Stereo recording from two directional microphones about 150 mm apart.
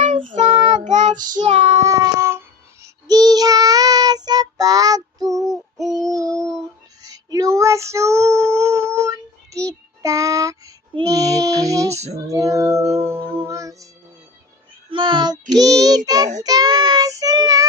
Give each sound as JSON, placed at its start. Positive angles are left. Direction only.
{"t": 0.0, "sound": "child singing", "side_deg": -40}
{"t": 1.9, "sound": "a sound", "side_deg": -20}
{"t": 2.8, "sound": "child singing", "side_deg": -25}
{"t": 7.0, "sound": "female singing", "side_deg": -25}
{"t": 10.9, "sound": "child singing", "side_deg": -25}
{"t": 11.9, "sound": "child singing", "side_deg": -45}
{"t": 12.2, "sound": "music", "side_deg": -25}
{"t": 14.8, "sound": "child singing", "side_deg": -30}